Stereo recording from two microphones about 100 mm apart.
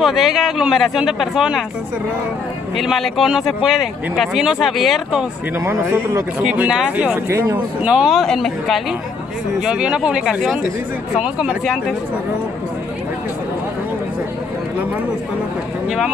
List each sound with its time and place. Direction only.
0.0 s speech: centre (ahead or behind)
2.8 s speech: centre (ahead or behind)
5.6 s a man's voice: 30° right (ahead or behind)
6.4 s speech: 10° right (ahead or behind)
7.2 s a man's voice: 25° right (ahead or behind)
7.8 s speech: 10° right (ahead or behind)
8.2 s speech: centre (ahead or behind)
9.6 s speech: 10° right (ahead or behind)